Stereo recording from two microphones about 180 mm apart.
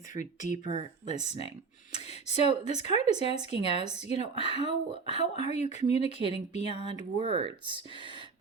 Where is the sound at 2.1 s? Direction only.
35° left (ahead or behind).